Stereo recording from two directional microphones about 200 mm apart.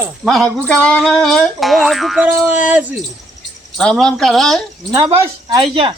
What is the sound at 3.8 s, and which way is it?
Speech, 5° left (ahead or behind).